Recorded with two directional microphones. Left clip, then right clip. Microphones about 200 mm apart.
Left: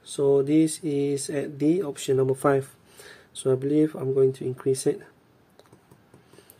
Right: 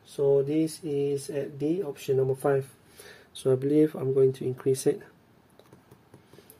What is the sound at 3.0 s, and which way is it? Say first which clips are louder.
Speech: left 1 dB; 5° left (ahead or behind).